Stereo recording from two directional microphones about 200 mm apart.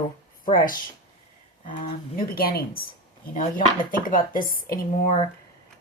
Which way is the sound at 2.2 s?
50° left (ahead or behind).